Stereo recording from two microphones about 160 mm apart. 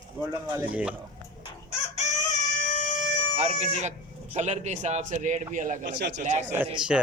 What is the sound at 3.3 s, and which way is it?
Speech, 45° right (ahead or behind).